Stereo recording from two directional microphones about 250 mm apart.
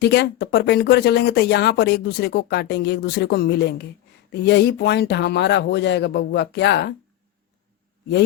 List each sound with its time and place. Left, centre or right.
0.0 s speech: left